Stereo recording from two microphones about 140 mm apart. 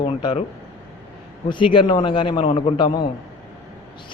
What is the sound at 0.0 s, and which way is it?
Speech, 35° left (ahead or behind).